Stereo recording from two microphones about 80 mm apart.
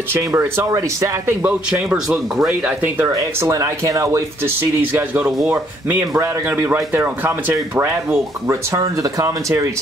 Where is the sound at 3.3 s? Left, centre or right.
Right.